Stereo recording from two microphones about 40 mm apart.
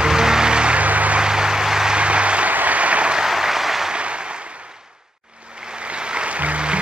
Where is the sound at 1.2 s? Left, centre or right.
Centre.